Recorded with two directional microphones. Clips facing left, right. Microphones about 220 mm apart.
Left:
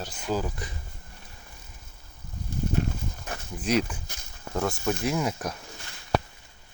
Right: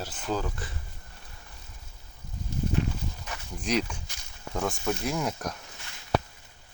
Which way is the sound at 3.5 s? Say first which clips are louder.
Left 3 dB; 5° left (ahead or behind).